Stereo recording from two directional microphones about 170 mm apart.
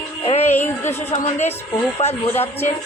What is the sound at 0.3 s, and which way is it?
Music, 40° left (ahead or behind).